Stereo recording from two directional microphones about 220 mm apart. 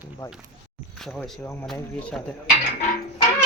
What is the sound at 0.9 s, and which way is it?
Speech, centre (ahead or behind).